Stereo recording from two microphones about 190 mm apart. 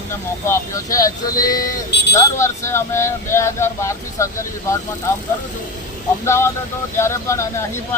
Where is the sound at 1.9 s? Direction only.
65° left (ahead or behind).